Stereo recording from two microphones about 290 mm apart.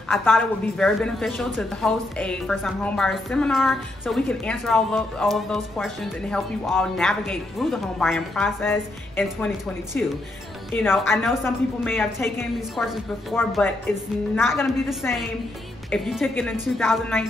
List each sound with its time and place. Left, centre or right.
0.1 s a woman's voice: centre